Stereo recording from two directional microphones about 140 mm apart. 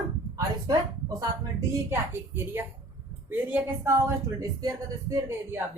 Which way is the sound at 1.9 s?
15° right (ahead or behind).